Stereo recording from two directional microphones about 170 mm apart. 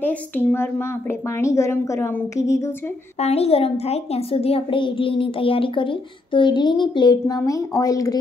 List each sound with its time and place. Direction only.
0.0 s a woman's voice: 10° left (ahead or behind)
3.2 s a child's voice: 35° left (ahead or behind); by 8.2 s 20° left (ahead or behind)